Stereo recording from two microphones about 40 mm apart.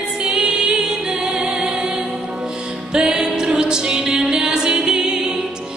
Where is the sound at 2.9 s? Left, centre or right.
Centre.